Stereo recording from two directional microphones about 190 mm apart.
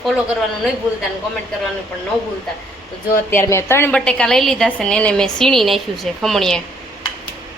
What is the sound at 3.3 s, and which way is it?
A woman's voice, 15° left (ahead or behind).